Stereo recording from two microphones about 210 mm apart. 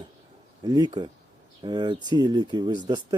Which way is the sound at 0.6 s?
20° right (ahead or behind).